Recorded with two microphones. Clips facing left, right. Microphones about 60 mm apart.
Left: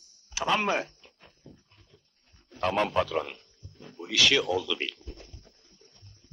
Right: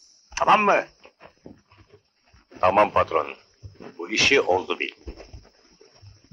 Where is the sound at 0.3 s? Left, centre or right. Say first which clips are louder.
Right 9 dB; right.